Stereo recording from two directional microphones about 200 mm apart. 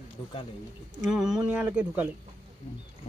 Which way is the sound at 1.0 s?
5° right (ahead or behind).